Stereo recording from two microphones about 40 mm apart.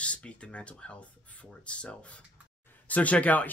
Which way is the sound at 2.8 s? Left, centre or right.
Left.